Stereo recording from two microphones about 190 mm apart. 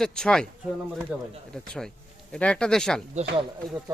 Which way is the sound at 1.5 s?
5° left (ahead or behind).